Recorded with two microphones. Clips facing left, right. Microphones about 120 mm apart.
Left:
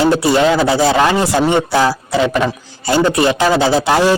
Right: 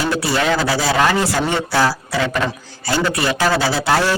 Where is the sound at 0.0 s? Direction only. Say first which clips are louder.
Left 7 dB; 20° left (ahead or behind).